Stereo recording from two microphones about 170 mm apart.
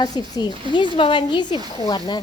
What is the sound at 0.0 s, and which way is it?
Speech, 25° left (ahead or behind).